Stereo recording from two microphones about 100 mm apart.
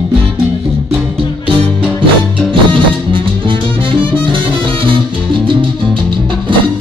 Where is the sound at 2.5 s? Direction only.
55° right (ahead or behind).